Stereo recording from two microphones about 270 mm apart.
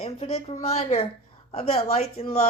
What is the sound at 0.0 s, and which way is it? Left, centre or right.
A woman's voice, left.